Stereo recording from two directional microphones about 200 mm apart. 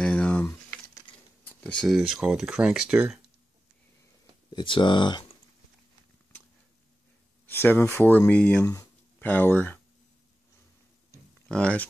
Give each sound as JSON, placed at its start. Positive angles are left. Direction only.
{"t": 0.0, "sound": "a sound", "side_deg": 5}
{"t": 1.6, "sound": "speech", "side_deg": 5}
{"t": 4.5, "sound": "speech", "side_deg": 25}
{"t": 7.4, "sound": "speech", "side_deg": 10}
{"t": 11.4, "sound": "speech", "side_deg": 5}